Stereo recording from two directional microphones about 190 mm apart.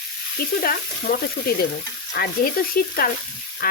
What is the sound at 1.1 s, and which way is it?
A woman's voice, 50° left (ahead or behind).